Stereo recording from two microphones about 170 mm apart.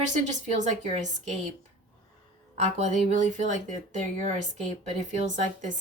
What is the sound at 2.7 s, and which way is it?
Speech, 45° right (ahead or behind).